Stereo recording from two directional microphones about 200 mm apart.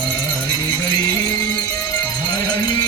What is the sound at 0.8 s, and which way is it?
Music, 20° left (ahead or behind).